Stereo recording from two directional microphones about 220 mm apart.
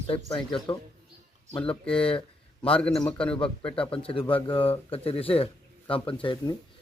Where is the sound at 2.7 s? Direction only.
5° left (ahead or behind).